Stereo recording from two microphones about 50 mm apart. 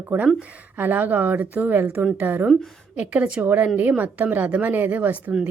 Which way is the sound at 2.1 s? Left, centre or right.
Right.